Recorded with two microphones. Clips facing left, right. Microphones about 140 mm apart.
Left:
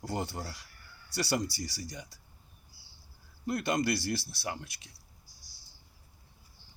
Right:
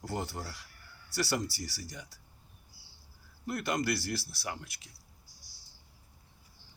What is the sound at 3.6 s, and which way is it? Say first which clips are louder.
Speech: left 2 dB; 20° left (ahead or behind).